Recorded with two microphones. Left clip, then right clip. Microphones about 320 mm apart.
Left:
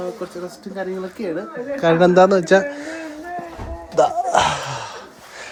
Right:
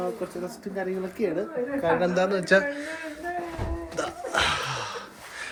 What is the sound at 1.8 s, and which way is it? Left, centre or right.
A man's voice, left.